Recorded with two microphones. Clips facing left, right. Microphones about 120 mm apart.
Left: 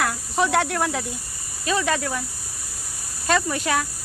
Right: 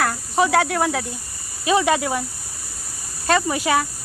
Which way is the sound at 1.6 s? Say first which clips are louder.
Right 5 dB; 15° right (ahead or behind).